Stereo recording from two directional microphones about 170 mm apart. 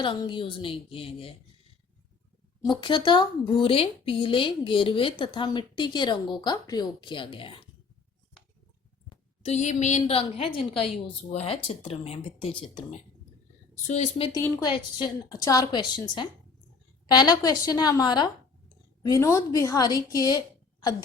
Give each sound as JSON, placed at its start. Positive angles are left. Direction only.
{"t": 0.0, "sound": "speech", "side_deg": 30}
{"t": 2.6, "sound": "speech", "side_deg": 30}
{"t": 9.0, "sound": "a woman's voice", "side_deg": 40}
{"t": 13.8, "sound": "speech", "side_deg": 40}
{"t": 14.3, "sound": "speech", "side_deg": 25}